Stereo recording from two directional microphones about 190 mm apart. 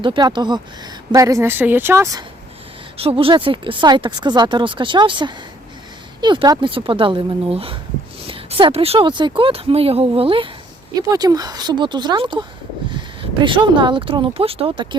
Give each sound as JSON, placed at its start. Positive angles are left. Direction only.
{"t": 0.0, "sound": "speech", "side_deg": -25}
{"t": 3.0, "sound": "speech", "side_deg": -30}
{"t": 13.4, "sound": "speech", "side_deg": -25}